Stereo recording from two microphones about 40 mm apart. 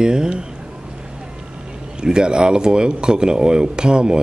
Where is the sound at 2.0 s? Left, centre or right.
Right.